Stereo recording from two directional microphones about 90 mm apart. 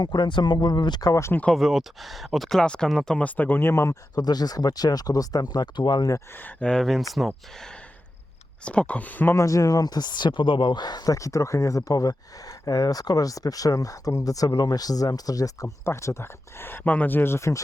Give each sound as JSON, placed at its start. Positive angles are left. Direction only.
{"t": 0.0, "sound": "speech", "side_deg": 55}
{"t": 1.1, "sound": "speech", "side_deg": 30}
{"t": 1.5, "sound": "speech", "side_deg": 0}
{"t": 4.1, "sound": "speech", "side_deg": 50}
{"t": 6.4, "sound": "speech", "side_deg": 10}
{"t": 8.6, "sound": "speech", "side_deg": 15}
{"t": 9.3, "sound": "speech", "side_deg": 35}